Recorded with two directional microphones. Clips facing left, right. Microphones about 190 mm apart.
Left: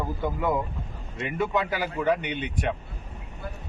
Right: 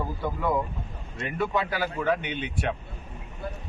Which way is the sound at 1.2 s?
15° left (ahead or behind).